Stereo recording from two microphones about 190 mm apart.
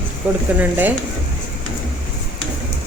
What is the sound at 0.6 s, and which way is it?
Speech, 10° right (ahead or behind).